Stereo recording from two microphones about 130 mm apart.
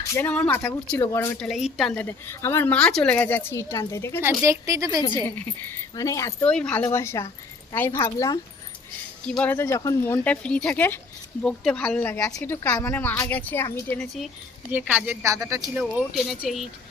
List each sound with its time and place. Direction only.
0.1 s a woman's voice: 15° left (ahead or behind)
1.4 s speech: centre (ahead or behind)
2.0 s speech: 15° left (ahead or behind)
2.7 s speech: 5° left (ahead or behind)
4.2 s a woman's voice: 20° right (ahead or behind)
6.0 s a woman's voice: 25° left (ahead or behind)
6.4 s speech: 10° left (ahead or behind)
6.8 s a woman's voice: 20° left (ahead or behind)
9.2 s speech: 10° left (ahead or behind)
14.7 s a woman's voice: 10° right (ahead or behind)
15.9 s speech: 5° right (ahead or behind)